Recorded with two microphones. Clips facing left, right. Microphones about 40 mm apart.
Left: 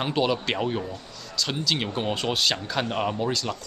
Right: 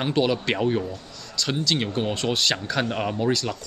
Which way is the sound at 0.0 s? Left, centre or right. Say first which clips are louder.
Right 2 dB; centre.